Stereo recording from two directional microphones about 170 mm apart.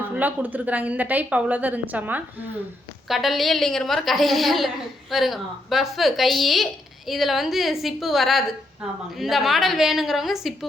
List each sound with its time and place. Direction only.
0.1 s a woman's voice: 10° right (ahead or behind)